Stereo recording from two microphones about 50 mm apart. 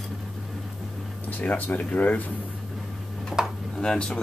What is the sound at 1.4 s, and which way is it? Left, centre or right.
Speech, left.